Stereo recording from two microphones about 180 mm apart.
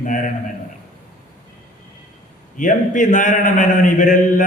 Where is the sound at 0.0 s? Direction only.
45° left (ahead or behind).